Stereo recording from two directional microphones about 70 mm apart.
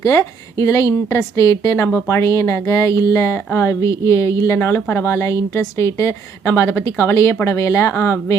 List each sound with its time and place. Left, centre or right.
0.0 s a woman's voice: left
4.5 s a woman's voice: left